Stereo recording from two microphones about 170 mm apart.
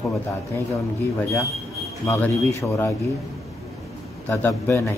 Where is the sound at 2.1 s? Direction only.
15° left (ahead or behind).